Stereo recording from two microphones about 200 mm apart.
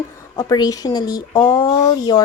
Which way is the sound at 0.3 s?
20° left (ahead or behind).